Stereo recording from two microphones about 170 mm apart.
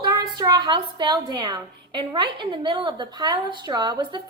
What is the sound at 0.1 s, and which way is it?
A woman's voice, 25° right (ahead or behind).